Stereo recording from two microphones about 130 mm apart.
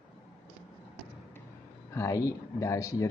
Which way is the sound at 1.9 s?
25° left (ahead or behind).